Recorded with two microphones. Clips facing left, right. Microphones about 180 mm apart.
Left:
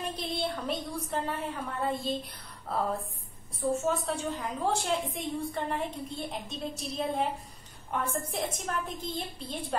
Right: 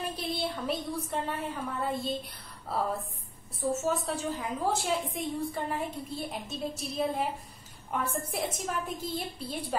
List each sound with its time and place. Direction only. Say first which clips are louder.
0.0 s a woman's voice: even; centre (ahead or behind)